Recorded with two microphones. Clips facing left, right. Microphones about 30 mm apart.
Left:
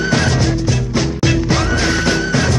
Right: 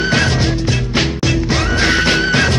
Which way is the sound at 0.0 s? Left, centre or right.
Right.